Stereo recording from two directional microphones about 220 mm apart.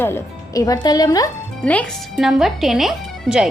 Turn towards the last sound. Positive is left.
turn(degrees=0)  # may be behind; listen again after turning